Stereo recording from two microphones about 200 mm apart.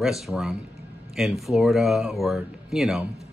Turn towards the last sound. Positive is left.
turn(degrees=0)  # may be behind; listen again after turning